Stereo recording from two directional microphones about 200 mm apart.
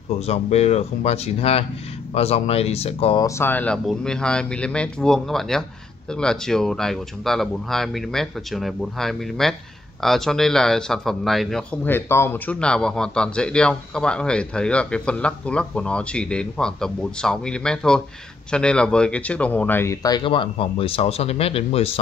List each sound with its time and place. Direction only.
0.3 s speech: 35° left (ahead or behind)
3.3 s speech: 10° left (ahead or behind); by 21.9 s 30° left (ahead or behind)